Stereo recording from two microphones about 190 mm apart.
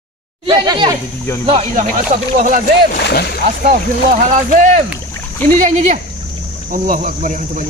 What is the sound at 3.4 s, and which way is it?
Speech, 55° right (ahead or behind).